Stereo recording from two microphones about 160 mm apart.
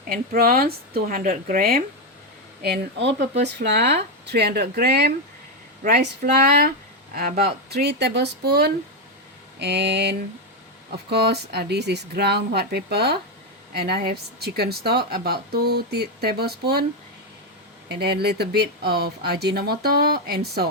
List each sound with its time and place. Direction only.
0.1 s a woman's voice: 70° right (ahead or behind)
2.6 s a woman's voice: 85° right
17.8 s a woman's voice: 90° right